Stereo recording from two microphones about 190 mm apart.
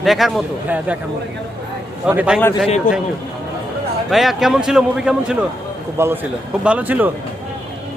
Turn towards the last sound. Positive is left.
turn(degrees=-10)  # may be behind; listen again after turning